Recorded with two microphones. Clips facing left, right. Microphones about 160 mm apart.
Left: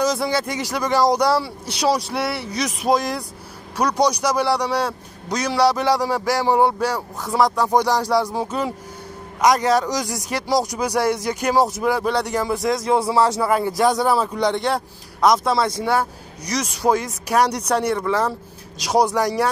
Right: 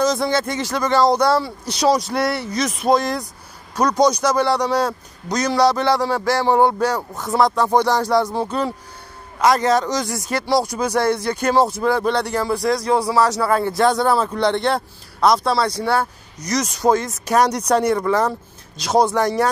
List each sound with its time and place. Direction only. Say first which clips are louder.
0.1 s a man's voice: right 2 dB; 10° left (ahead or behind); by 13.5 s 25° left (ahead or behind)
13.5 s a man's voice: right 1 dB; 10° left (ahead or behind)
18.9 s a man's voice: right 1 dB; 15° left (ahead or behind)